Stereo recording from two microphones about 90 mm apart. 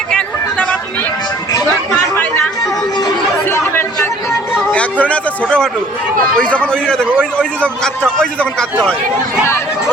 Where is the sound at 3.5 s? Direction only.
25° left (ahead or behind).